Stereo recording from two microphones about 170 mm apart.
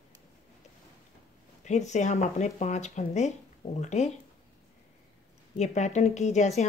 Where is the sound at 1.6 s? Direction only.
45° left (ahead or behind).